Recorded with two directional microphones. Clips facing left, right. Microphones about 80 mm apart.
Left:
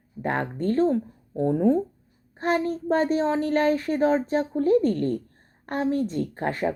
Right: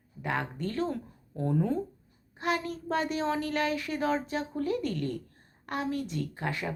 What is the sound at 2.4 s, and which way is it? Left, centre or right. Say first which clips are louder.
A woman's voice: left 7 dB; left.